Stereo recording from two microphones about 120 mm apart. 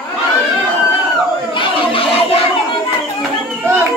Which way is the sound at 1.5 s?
50° left (ahead or behind).